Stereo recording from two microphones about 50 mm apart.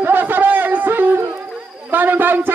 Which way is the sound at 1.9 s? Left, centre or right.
Right.